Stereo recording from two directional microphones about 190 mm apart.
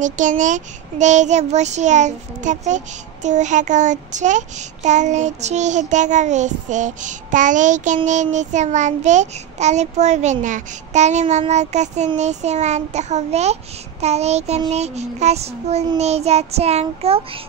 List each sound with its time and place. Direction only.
0.0 s a child's voice: 40° right (ahead or behind)